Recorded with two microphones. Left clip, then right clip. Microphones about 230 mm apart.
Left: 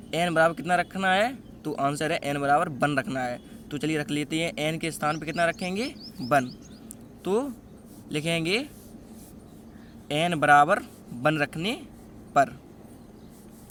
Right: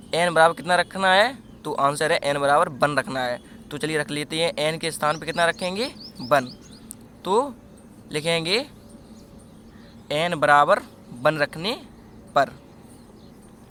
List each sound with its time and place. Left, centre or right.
0.1 s speech: centre
10.1 s speech: left